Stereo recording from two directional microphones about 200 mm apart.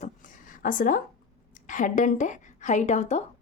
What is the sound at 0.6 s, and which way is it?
A woman's voice, 40° left (ahead or behind).